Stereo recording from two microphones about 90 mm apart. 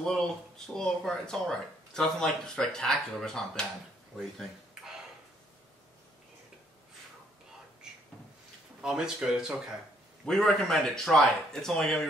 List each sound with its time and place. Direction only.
0.7 s speech: 5° left (ahead or behind)
4.2 s a sound: centre (ahead or behind)
7.8 s cupboard open or close: 10° right (ahead or behind)
8.8 s speech: 5° right (ahead or behind)
10.2 s speech: 5° left (ahead or behind)